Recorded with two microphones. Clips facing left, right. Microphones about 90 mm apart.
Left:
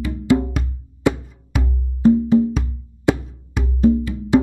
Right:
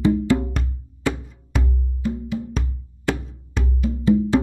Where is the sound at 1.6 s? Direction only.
35° left (ahead or behind).